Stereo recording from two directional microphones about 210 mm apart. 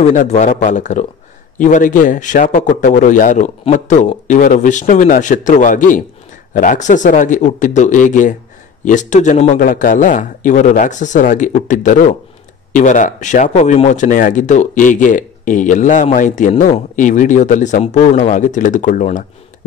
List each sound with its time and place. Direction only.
0.0 s speech: 35° left (ahead or behind)